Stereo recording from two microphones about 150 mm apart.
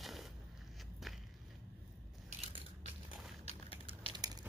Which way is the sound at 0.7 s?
Centre (ahead or behind).